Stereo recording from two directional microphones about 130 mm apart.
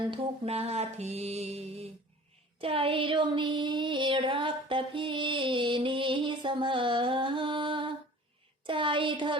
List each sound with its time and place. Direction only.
0.1 s music: 50° right (ahead or behind)